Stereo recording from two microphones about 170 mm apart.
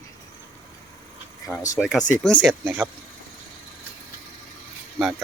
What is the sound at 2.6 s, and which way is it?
Speech, 10° right (ahead or behind).